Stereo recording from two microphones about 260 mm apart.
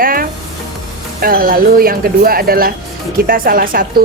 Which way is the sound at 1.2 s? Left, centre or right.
Right.